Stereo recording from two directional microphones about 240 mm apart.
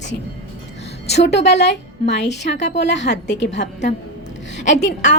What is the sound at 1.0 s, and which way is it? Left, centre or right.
A woman's voice, left.